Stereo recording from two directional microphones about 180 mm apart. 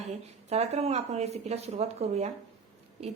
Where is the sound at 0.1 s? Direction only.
35° right (ahead or behind).